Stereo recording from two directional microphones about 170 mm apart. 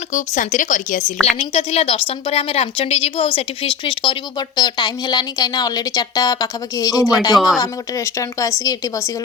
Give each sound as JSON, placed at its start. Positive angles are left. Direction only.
{"t": 0.1, "sound": "speech", "side_deg": 45}
{"t": 1.4, "sound": "a woman's voice", "side_deg": 35}